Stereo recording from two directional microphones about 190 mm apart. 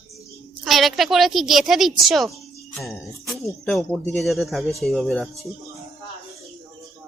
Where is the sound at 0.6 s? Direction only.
Centre (ahead or behind).